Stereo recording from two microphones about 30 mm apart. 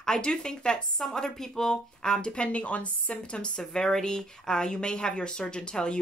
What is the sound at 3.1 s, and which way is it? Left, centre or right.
A woman's voice, left.